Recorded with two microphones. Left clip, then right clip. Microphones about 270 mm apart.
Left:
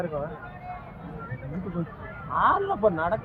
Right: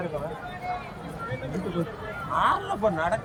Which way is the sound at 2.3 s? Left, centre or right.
Left.